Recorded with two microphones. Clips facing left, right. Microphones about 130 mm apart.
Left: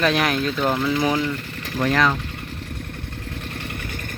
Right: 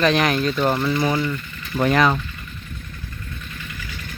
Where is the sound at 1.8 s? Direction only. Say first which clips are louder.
Right 2 dB; 15° right (ahead or behind).